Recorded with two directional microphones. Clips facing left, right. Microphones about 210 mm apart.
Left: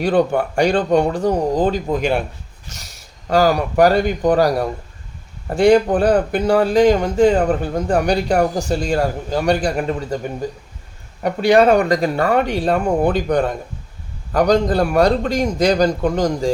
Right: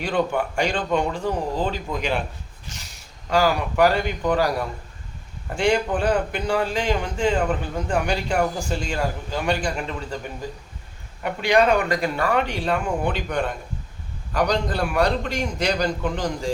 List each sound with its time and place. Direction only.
0.0 s speech: 40° left (ahead or behind)
3.2 s speech: 40° left (ahead or behind)